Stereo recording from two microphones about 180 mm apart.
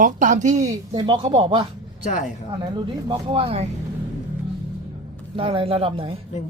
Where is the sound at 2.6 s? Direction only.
20° right (ahead or behind).